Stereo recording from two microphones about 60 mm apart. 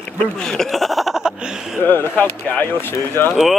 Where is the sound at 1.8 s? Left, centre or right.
Left.